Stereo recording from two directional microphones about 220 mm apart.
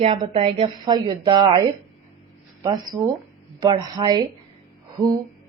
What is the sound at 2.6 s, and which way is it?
Speech, 20° right (ahead or behind).